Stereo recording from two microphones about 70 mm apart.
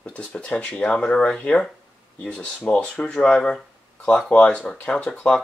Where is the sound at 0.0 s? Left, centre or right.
Centre.